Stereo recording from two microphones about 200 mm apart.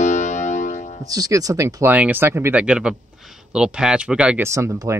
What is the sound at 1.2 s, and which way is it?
Speech, 15° right (ahead or behind).